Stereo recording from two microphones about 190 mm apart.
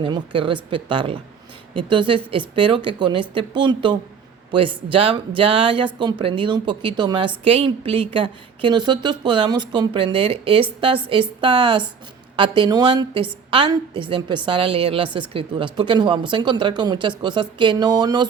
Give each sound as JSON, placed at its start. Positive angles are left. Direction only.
{"t": 0.0, "sound": "speech", "side_deg": -25}